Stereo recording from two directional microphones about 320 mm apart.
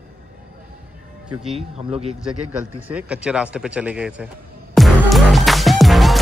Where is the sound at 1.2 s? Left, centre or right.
Centre.